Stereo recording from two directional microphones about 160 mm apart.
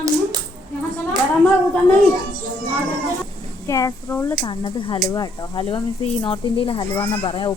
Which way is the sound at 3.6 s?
20° left (ahead or behind).